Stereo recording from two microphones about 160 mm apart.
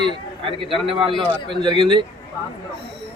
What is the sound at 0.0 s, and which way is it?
A man's voice, 30° right (ahead or behind).